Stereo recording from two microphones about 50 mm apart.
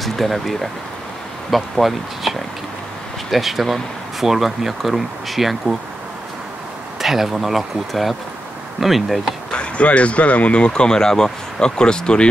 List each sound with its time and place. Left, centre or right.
0.0 s speech: centre
7.0 s speech: centre
9.5 s speech: left